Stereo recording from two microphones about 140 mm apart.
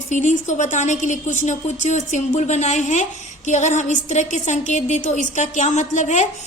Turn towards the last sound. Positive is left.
turn(degrees=55)  # may be behind; listen again after turning